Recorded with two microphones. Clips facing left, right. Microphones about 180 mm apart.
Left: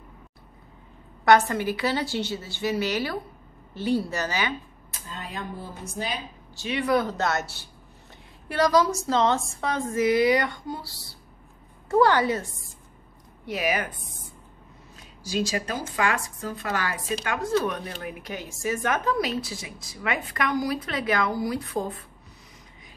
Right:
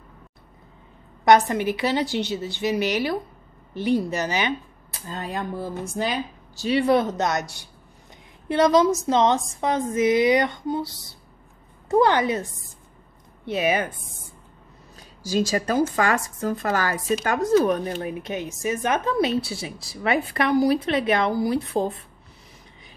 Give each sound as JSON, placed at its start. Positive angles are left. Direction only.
{"t": 1.2, "sound": "speech", "side_deg": -20}
{"t": 5.1, "sound": "speech", "side_deg": -50}
{"t": 6.5, "sound": "speech", "side_deg": -35}
{"t": 13.5, "sound": "speech", "side_deg": -25}
{"t": 15.2, "sound": "speech", "side_deg": -40}